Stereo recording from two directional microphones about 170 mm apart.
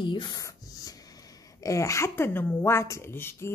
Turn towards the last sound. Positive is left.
turn(degrees=15)  # may be behind; listen again after turning